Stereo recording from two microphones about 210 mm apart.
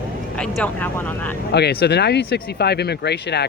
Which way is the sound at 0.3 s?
5° left (ahead or behind).